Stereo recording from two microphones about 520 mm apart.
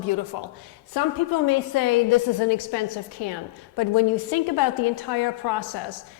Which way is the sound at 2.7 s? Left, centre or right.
Left.